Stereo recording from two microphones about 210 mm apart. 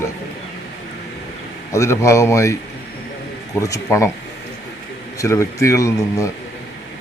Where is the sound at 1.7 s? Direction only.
15° left (ahead or behind).